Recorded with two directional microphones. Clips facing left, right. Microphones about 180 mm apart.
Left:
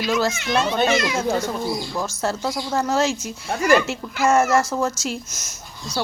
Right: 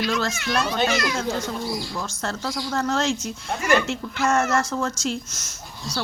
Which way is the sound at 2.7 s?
5° left (ahead or behind).